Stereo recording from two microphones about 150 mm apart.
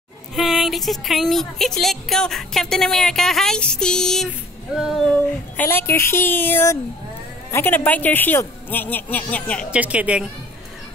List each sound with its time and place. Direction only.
0.4 s speech: centre (ahead or behind)
5.6 s a woman's voice: 15° left (ahead or behind)
9.7 s speech: 10° right (ahead or behind)